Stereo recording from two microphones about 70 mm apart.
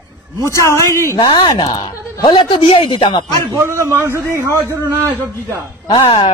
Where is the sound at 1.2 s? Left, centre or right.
Left.